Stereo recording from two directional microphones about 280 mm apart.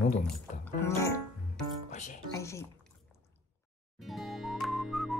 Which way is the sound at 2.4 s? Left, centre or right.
Centre.